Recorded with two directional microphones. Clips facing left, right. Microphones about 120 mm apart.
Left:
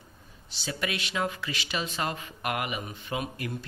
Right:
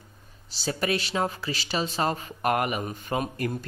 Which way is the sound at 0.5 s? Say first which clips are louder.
Right 6 dB; 40° right (ahead or behind).